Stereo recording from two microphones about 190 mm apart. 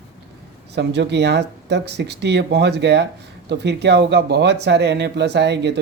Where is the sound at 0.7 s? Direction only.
65° right (ahead or behind).